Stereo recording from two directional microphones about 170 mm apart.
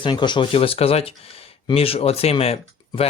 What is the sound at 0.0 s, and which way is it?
Speech, 25° left (ahead or behind).